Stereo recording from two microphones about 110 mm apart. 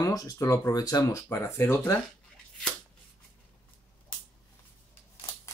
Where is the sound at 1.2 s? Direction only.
20° left (ahead or behind).